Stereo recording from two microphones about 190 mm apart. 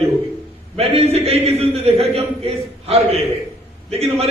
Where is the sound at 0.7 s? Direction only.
30° right (ahead or behind).